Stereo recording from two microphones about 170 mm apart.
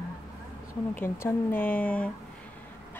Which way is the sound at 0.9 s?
15° left (ahead or behind).